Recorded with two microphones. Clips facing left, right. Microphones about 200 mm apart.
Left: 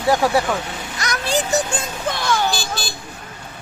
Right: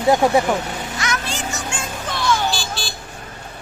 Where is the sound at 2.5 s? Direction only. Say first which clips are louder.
Left 1 dB; 45° left (ahead or behind).